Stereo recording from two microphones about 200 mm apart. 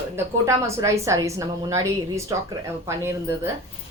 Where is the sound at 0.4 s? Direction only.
15° right (ahead or behind).